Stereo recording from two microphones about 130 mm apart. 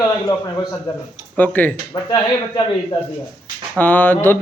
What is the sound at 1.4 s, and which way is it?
Speech, 15° left (ahead or behind).